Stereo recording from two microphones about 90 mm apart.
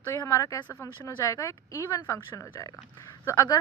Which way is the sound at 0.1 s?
40° left (ahead or behind).